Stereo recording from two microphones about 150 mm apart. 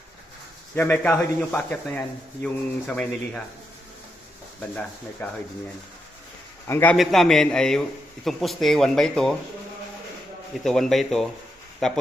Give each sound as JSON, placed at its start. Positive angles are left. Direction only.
{"t": 0.8, "sound": "speech", "side_deg": 10}
{"t": 5.2, "sound": "speech", "side_deg": 10}
{"t": 6.7, "sound": "speech", "side_deg": 15}
{"t": 6.9, "sound": "speech", "side_deg": 0}
{"t": 10.5, "sound": "speech", "side_deg": 0}